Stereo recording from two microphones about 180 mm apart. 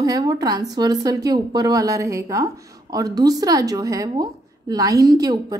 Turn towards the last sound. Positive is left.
turn(degrees=-20)  # may be behind; listen again after turning